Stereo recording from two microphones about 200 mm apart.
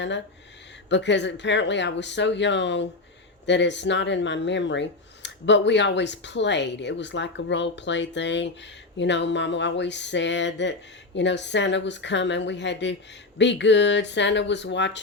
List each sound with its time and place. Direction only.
0.9 s speech: 60° left (ahead or behind)